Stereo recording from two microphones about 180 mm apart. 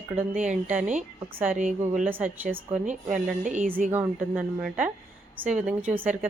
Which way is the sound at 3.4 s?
45° right (ahead or behind).